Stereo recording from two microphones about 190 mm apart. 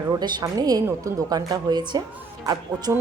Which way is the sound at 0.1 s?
20° right (ahead or behind).